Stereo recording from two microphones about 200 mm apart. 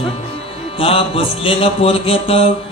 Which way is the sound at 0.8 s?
30° left (ahead or behind).